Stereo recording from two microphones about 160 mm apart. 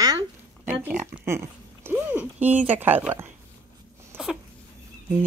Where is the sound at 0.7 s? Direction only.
10° right (ahead or behind).